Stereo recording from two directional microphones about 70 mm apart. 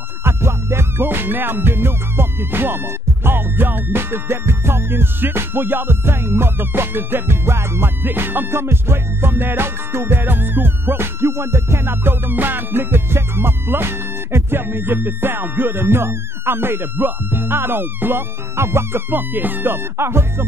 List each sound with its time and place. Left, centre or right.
0.2 s music: right